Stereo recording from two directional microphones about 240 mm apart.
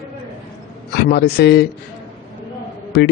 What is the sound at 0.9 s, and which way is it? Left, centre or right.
Speech, left.